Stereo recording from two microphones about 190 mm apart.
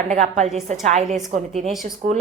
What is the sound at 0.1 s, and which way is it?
A woman's voice, 40° right (ahead or behind).